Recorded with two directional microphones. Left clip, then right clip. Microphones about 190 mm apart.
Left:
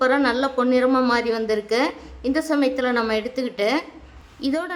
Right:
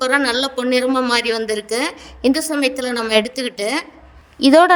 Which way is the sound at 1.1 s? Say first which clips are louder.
Right 3 dB; 45° right (ahead or behind).